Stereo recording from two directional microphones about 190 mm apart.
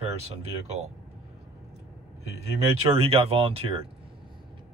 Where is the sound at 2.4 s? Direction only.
30° right (ahead or behind).